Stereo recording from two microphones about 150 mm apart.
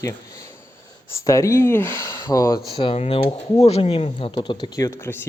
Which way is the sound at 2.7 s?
35° left (ahead or behind).